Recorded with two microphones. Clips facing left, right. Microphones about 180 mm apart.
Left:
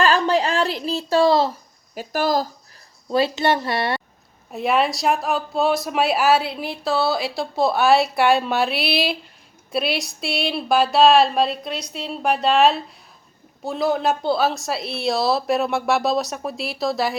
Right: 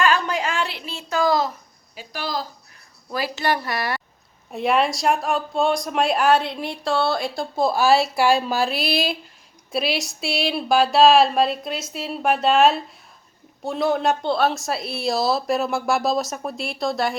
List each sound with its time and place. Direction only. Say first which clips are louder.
0.0 s a sound: left 3 dB; 35° left (ahead or behind)
2.0 s speech: left 8 dB; 45° left (ahead or behind)
3.1 s a woman's voice: left 5 dB; 25° left (ahead or behind)
4.5 s speech: even; centre (ahead or behind)